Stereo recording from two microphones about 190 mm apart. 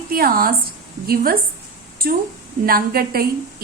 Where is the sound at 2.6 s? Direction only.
50° right (ahead or behind).